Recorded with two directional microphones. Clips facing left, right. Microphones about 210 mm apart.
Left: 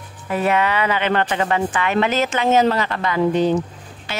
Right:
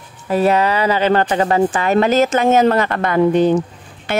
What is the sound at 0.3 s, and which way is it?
Speech, 35° right (ahead or behind).